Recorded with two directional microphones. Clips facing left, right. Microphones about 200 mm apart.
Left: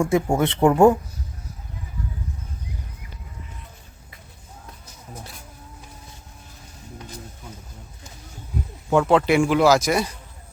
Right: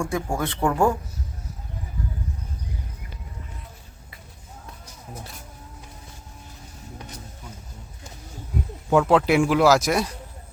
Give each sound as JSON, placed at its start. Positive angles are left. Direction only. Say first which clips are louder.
{"t": 0.0, "sound": "speech", "louder": "left 6 dB", "side_deg": 25}
{"t": 9.0, "sound": "speech", "louder": "left 1 dB", "side_deg": 0}